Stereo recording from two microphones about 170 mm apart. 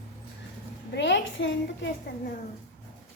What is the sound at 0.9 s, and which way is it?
A child's voice, 90° left.